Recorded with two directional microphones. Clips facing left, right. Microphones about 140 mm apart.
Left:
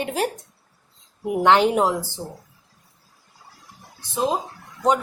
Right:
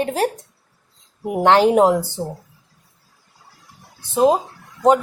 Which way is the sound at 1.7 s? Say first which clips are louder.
Right 6 dB; 45° right (ahead or behind).